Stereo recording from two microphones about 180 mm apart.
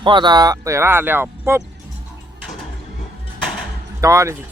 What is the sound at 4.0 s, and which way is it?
Speech, 15° right (ahead or behind).